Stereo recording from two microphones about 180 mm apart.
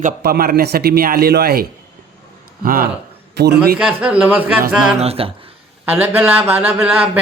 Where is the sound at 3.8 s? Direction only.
5° right (ahead or behind).